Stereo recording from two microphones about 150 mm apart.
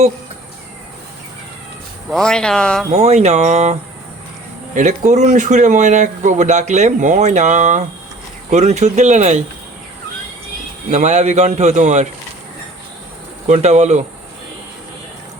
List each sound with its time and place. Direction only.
2.0 s speech: 5° left (ahead or behind)
2.9 s speech: 45° right (ahead or behind)
10.9 s speech: 50° right (ahead or behind)
13.5 s speech: 50° right (ahead or behind)